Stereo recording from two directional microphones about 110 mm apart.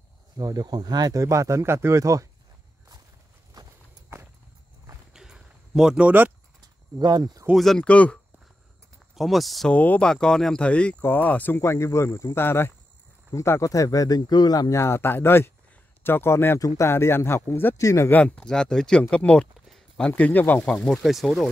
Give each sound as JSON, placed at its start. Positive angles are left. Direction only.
{"t": 0.4, "sound": "speech", "side_deg": -35}
{"t": 3.6, "sound": "walk", "side_deg": -40}
{"t": 5.1, "sound": "a sound", "side_deg": -5}
{"t": 6.6, "sound": "cricket", "side_deg": -40}
{"t": 7.5, "sound": "speech", "side_deg": 5}
{"t": 9.1, "sound": "speech", "side_deg": 0}
{"t": 9.8, "sound": "speech", "side_deg": 10}
{"t": 18.2, "sound": "speech", "side_deg": 5}